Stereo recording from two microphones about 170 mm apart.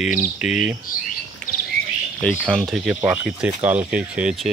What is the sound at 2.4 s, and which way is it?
Speech, centre (ahead or behind).